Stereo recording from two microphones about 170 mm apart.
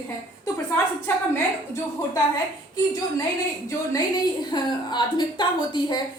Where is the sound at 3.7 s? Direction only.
20° left (ahead or behind).